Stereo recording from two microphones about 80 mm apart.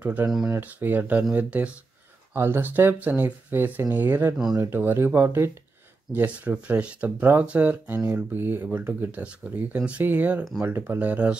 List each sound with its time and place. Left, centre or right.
0.0 s speech: right